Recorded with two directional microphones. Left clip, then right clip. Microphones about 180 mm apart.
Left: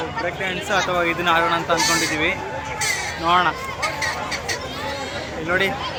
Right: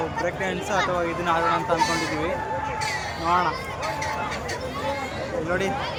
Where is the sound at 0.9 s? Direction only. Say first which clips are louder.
Left 5 dB; 5° left (ahead or behind).